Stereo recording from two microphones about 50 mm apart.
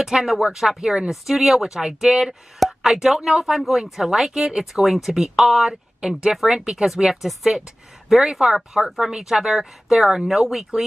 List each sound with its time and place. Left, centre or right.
0.0 s speech: centre
6.6 s speech: centre